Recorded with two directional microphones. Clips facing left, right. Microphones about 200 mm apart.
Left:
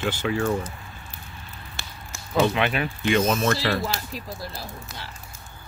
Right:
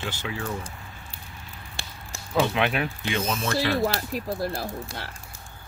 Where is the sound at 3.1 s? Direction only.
50° left (ahead or behind).